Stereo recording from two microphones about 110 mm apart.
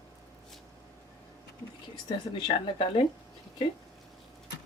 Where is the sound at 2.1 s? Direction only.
50° left (ahead or behind).